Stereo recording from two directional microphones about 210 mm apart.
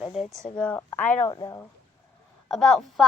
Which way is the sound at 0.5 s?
5° left (ahead or behind).